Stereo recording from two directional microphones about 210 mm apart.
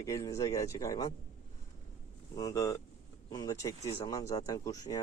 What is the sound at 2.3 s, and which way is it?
Speech, 15° left (ahead or behind).